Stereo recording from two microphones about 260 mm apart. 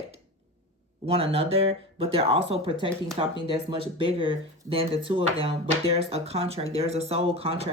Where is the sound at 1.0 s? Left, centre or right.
Right.